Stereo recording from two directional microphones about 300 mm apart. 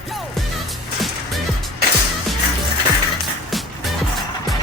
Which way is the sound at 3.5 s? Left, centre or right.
Centre.